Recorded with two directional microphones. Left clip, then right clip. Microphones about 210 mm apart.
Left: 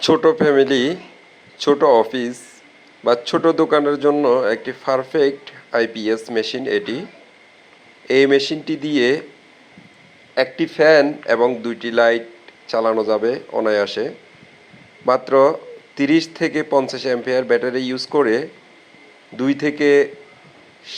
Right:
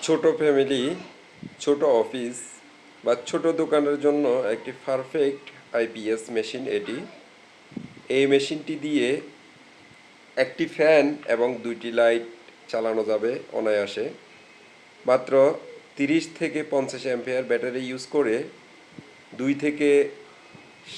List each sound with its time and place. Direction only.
0.0 s a man's voice: 20° left (ahead or behind)
8.0 s a man's voice: 20° left (ahead or behind)
10.3 s a man's voice: 15° left (ahead or behind)